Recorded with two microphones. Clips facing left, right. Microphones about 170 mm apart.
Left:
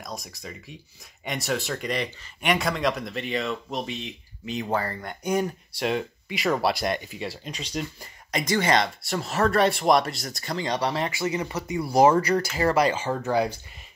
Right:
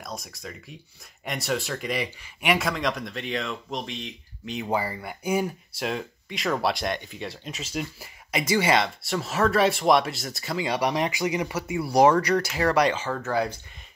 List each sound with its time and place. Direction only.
0.0 s speech: centre (ahead or behind)
4.6 s speech: 10° right (ahead or behind)
13.0 s speech: 15° left (ahead or behind)